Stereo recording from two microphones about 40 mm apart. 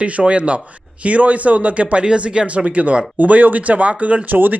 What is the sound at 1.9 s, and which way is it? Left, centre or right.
Speech, right.